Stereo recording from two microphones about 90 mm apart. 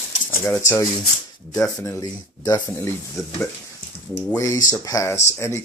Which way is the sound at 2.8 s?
30° left (ahead or behind).